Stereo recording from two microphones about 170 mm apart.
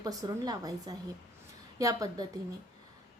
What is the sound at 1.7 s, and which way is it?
Speech, 20° right (ahead or behind).